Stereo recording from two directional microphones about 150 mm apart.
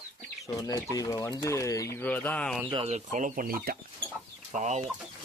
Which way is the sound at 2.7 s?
40° right (ahead or behind).